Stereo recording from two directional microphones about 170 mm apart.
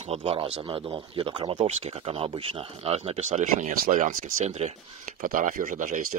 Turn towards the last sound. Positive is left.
turn(degrees=-55)  # may be behind; listen again after turning